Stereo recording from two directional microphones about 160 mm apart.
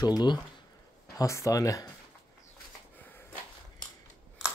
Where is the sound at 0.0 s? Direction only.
25° left (ahead or behind).